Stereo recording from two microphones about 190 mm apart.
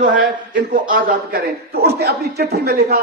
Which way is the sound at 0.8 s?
45° right (ahead or behind).